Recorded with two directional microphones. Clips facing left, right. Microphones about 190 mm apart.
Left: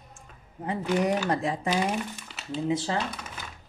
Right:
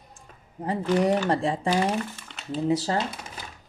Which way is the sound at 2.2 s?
5° left (ahead or behind).